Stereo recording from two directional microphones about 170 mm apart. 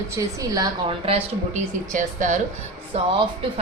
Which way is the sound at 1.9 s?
50° right (ahead or behind).